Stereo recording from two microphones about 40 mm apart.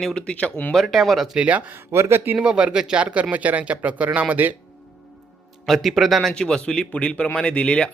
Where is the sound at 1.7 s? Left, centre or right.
Right.